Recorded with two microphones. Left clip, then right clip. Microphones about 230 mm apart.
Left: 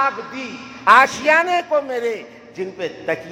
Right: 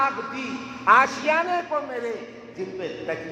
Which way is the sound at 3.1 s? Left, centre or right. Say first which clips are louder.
Left 8 dB; left.